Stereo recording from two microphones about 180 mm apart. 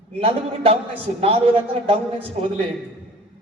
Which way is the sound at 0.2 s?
35° right (ahead or behind).